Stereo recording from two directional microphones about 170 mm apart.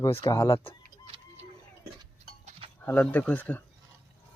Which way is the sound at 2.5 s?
35° right (ahead or behind).